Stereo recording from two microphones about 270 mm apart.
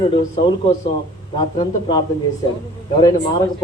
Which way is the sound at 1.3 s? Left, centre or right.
Centre.